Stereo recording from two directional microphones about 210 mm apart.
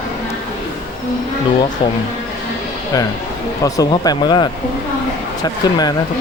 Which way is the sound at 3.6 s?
15° left (ahead or behind).